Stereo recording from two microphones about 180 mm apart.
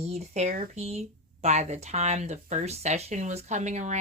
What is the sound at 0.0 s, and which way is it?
Speech, 35° right (ahead or behind).